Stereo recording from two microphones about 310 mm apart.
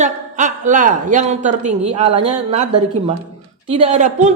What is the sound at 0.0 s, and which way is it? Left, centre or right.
A woman's voice, right.